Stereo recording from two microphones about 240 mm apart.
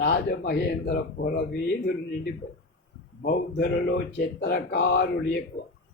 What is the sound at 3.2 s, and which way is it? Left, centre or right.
Speech, left.